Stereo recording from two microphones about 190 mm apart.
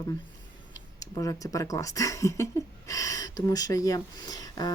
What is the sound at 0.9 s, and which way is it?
Speech, 15° left (ahead or behind).